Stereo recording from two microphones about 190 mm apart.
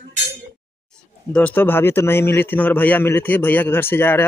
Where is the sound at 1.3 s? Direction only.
10° left (ahead or behind).